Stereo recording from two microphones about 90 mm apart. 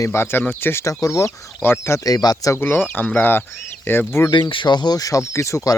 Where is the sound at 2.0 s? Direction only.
45° left (ahead or behind).